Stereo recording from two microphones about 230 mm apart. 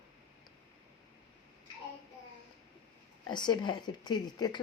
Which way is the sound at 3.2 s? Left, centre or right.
Centre.